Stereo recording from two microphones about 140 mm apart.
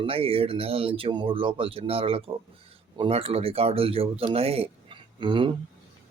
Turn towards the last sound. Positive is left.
turn(degrees=-35)  # may be behind; listen again after turning